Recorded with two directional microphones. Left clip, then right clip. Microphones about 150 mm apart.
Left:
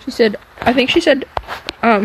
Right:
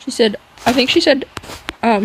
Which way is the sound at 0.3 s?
30° right (ahead or behind).